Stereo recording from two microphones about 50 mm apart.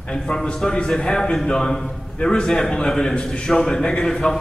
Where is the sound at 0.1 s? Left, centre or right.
Centre.